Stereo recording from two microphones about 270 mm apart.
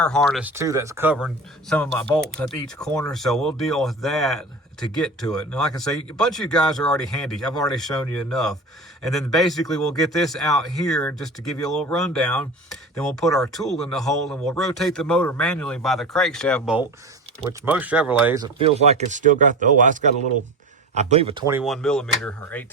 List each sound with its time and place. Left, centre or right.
0.0 s speech: centre
1.7 s speech: centre